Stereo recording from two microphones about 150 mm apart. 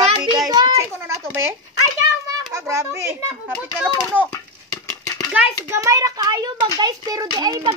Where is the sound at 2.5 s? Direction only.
20° right (ahead or behind).